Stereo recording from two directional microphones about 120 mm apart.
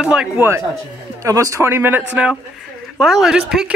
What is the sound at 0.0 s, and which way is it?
Speech, 5° right (ahead or behind).